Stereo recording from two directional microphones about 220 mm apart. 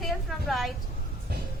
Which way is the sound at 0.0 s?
Centre (ahead or behind).